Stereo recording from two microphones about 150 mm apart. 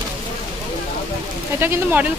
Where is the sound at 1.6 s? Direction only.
15° right (ahead or behind).